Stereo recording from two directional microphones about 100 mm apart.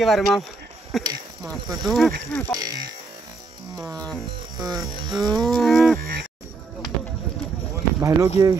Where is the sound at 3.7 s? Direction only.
35° right (ahead or behind).